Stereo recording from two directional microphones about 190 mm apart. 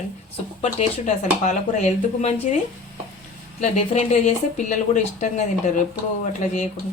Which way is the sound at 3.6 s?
35° left (ahead or behind).